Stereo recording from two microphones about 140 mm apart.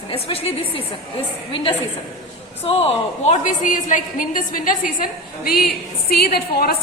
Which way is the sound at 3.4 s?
70° left (ahead or behind).